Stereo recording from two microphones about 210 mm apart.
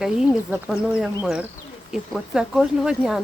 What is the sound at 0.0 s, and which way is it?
Speech, 5° right (ahead or behind).